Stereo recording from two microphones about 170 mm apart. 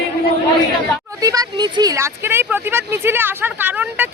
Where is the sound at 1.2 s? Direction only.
20° right (ahead or behind).